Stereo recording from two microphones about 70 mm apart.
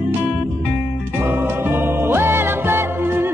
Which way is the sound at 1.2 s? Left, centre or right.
Right.